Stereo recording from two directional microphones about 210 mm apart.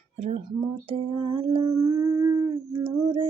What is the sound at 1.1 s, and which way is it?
Humming, 25° right (ahead or behind).